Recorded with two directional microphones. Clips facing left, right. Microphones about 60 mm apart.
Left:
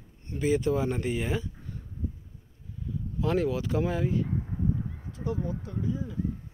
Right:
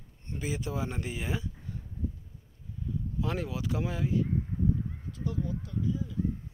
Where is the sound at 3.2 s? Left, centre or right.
Centre.